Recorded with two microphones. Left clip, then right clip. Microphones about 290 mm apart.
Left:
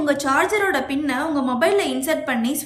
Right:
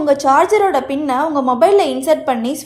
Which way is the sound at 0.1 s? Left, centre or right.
Centre.